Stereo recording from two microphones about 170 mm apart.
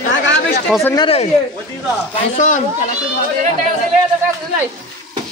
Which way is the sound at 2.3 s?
50° left (ahead or behind).